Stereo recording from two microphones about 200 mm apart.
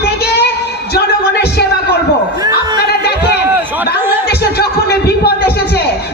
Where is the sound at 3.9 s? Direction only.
55° left (ahead or behind).